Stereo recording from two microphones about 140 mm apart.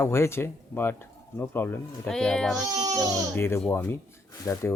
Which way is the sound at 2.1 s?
5° left (ahead or behind).